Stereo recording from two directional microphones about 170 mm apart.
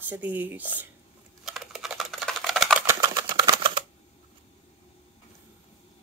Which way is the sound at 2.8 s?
20° right (ahead or behind).